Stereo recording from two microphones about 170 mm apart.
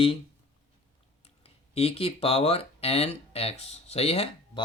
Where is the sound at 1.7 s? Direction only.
35° left (ahead or behind).